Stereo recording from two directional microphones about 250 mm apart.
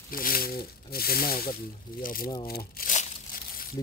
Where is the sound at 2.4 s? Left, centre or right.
Left.